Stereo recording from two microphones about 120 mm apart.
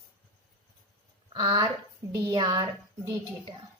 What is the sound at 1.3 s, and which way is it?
Speech, 40° right (ahead or behind).